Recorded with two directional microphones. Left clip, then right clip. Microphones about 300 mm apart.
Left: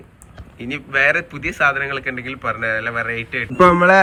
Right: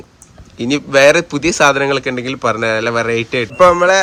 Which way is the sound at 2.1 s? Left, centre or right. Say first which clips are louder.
Right 7 dB; right.